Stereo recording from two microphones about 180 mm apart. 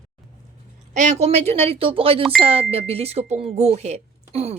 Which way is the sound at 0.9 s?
40° right (ahead or behind).